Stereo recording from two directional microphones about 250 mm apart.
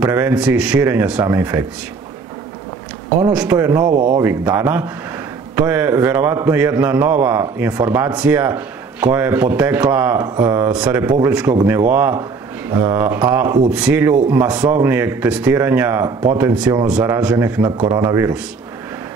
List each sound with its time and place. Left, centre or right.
0.0 s speech: centre
3.2 s a man's voice: centre
17.7 s speech: centre
18.0 s a man's voice: centre